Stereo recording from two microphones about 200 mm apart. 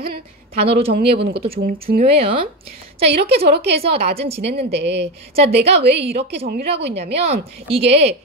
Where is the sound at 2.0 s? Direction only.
30° right (ahead or behind).